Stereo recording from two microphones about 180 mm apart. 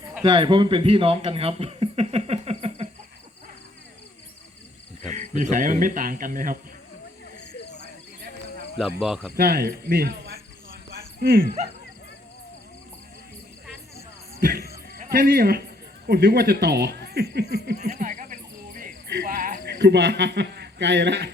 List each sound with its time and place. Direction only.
0.2 s speech: 25° right (ahead or behind)
5.0 s speech: 45° right (ahead or behind)
9.0 s speech: centre (ahead or behind)
9.3 s cricket: 60° right (ahead or behind)
14.4 s speech: 55° right (ahead or behind)
17.7 s frog: 40° right (ahead or behind); by 21.2 s 75° right (ahead or behind)